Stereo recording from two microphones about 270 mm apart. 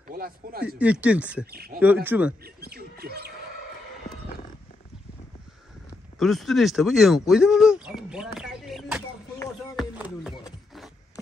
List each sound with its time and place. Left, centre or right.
0.1 s speech: right
0.7 s speech: centre
1.5 s speech: right
2.0 s speech: centre
2.4 s speech: right
6.1 s speech: centre
10.4 s a sound: centre